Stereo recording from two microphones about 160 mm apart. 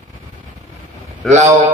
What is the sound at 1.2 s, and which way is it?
Speech, 5° left (ahead or behind).